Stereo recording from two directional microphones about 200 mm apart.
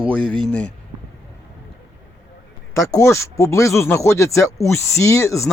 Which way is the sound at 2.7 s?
15° left (ahead or behind).